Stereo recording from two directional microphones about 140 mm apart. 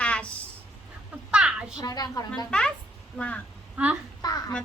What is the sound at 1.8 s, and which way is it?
Speech, 25° left (ahead or behind).